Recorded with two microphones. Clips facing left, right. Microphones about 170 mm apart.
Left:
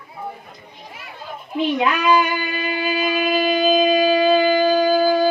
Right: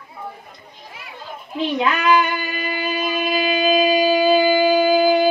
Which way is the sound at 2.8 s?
Centre (ahead or behind).